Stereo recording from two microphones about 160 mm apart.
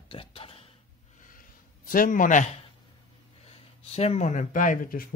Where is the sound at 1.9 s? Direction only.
60° left (ahead or behind).